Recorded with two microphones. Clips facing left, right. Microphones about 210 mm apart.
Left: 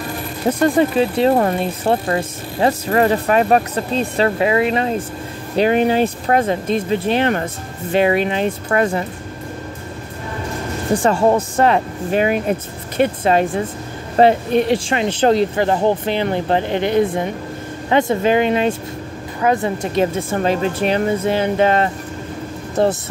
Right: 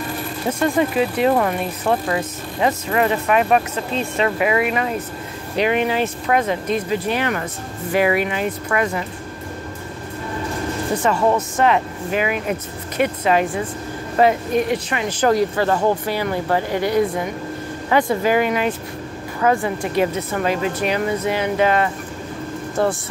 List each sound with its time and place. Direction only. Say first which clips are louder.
0.5 s speech: left 4 dB; 35° left (ahead or behind)
11.0 s speech: left 3 dB; 30° left (ahead or behind)